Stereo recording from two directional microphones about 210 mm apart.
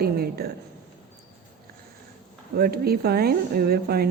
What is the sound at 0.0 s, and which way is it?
Speech, 45° right (ahead or behind).